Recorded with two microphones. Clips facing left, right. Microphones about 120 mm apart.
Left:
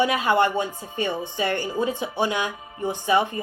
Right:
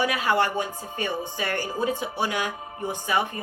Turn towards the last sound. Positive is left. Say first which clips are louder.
# left 4 dB
turn(degrees=25)  # may be behind; listen again after turning